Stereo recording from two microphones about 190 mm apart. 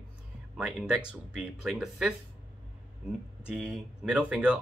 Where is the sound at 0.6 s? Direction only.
5° right (ahead or behind).